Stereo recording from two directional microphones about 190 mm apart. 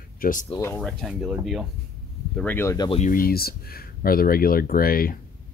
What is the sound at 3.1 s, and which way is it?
Speech, 50° left (ahead or behind).